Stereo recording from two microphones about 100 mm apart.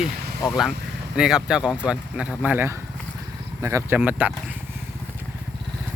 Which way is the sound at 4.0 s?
15° right (ahead or behind).